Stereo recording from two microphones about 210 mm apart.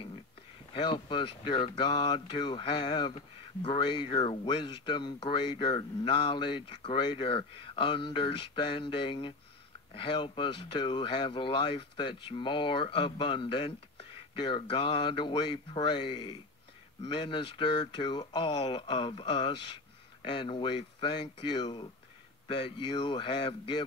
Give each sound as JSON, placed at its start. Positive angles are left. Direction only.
{"t": 0.7, "sound": "speech", "side_deg": 20}